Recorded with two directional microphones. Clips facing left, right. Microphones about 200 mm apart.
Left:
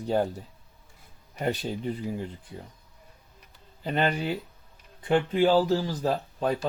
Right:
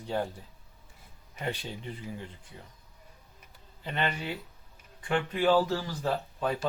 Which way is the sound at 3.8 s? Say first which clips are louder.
Left 6 dB; 40° left (ahead or behind).